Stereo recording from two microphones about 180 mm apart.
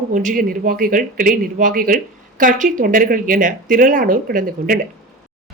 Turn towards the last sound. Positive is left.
turn(degrees=-50)  # may be behind; listen again after turning